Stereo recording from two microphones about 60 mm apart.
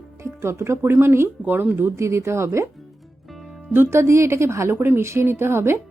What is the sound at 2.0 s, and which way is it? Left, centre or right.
Speech, right.